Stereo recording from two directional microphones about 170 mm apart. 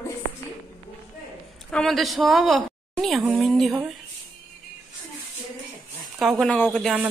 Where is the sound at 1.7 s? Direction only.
Centre (ahead or behind).